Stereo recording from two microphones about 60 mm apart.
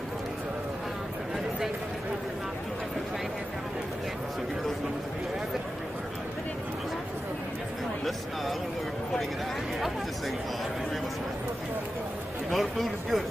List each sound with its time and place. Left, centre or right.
12.4 s speech: centre